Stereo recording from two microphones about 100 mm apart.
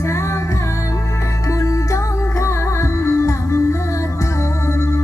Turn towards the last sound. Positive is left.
turn(degrees=30)  # may be behind; listen again after turning